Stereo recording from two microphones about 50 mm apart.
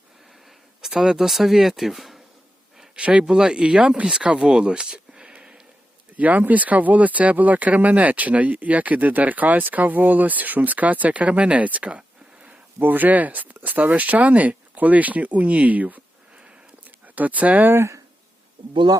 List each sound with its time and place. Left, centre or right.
0.8 s speech: centre
2.9 s speech: right
6.1 s speech: right
12.8 s speech: right
17.2 s speech: right